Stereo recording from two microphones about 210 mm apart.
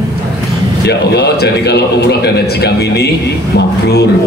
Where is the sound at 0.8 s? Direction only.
50° left (ahead or behind).